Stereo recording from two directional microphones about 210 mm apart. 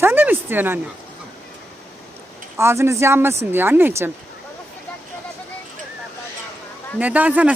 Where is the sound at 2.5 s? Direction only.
10° right (ahead or behind).